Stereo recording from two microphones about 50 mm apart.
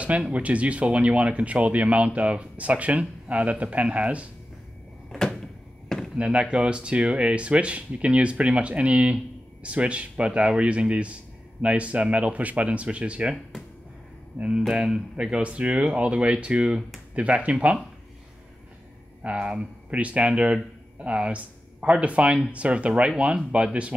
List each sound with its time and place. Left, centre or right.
0.3 s speech: right
5.9 s a sound: centre
6.1 s speech: right
14.7 s speech: centre
19.2 s speech: right